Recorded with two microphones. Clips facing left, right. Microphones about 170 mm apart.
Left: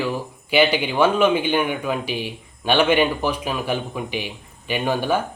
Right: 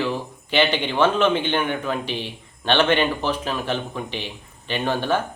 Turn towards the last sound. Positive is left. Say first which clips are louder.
# left 1 dB
turn(degrees=10)  # may be behind; listen again after turning